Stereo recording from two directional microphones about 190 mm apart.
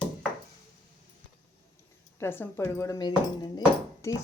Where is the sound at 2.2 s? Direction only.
10° left (ahead or behind).